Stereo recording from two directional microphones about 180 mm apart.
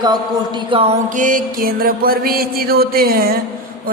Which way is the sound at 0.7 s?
35° right (ahead or behind).